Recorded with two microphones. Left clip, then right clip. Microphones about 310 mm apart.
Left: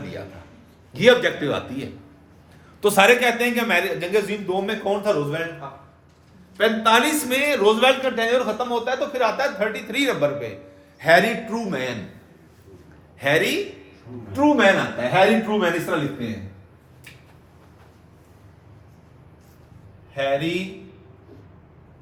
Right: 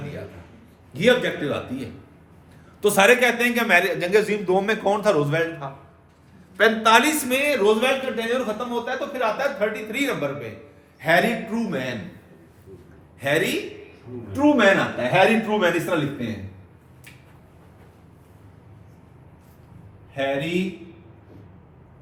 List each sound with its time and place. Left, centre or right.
0.9 s a man's voice: left
2.8 s a man's voice: centre; by 11.9 s left
13.1 s a man's voice: left
14.4 s a man's voice: centre
20.2 s a man's voice: centre